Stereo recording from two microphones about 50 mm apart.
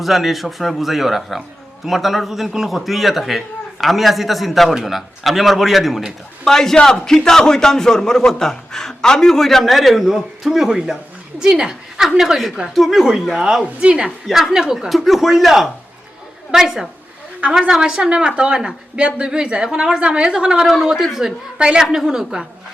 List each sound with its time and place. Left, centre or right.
0.0 s a man's voice: centre
11.3 s a woman's voice: centre
20.7 s a man's voice: centre
21.6 s a woman's voice: centre